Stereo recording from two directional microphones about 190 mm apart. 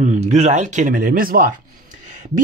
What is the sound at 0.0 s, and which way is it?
Speech, 40° right (ahead or behind).